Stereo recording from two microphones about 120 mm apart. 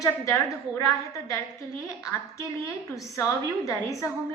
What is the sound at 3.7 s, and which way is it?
Speech, 25° left (ahead or behind).